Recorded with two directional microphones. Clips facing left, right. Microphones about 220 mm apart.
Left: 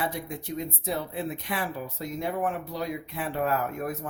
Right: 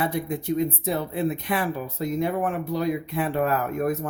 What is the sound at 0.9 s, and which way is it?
Speech, 55° right (ahead or behind).